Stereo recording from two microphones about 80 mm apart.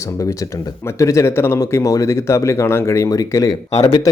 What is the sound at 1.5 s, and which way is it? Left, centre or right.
Speech, left.